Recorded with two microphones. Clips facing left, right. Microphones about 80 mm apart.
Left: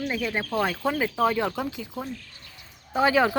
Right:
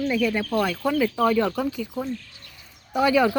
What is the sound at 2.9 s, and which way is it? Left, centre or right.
Speech, left.